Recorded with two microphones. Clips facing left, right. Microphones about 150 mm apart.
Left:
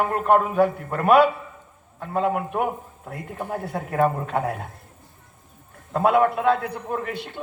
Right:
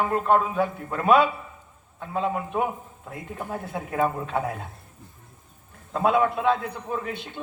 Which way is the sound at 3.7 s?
45° left (ahead or behind).